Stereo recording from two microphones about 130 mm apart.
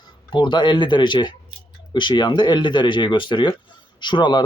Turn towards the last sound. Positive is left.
turn(degrees=35)  # may be behind; listen again after turning